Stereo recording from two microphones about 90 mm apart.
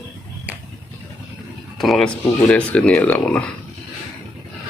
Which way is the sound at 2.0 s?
15° left (ahead or behind).